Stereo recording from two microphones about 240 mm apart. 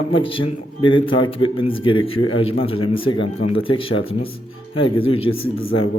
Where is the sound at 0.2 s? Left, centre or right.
Left.